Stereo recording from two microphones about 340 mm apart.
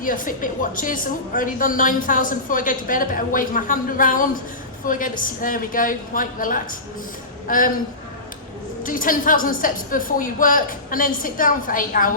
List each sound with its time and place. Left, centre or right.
0.0 s a woman's voice: left
8.8 s a woman's voice: left